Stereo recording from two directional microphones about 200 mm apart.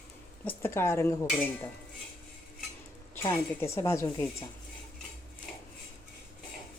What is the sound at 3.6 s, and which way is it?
Speech, 15° left (ahead or behind).